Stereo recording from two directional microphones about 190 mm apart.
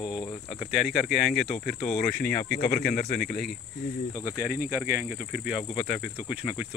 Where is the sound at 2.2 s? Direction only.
55° left (ahead or behind).